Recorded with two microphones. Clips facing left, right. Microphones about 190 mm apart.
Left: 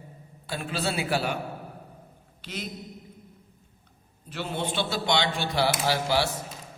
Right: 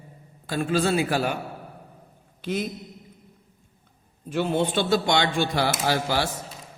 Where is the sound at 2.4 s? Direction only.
50° right (ahead or behind).